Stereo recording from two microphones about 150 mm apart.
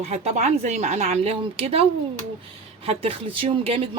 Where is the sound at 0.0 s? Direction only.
45° right (ahead or behind).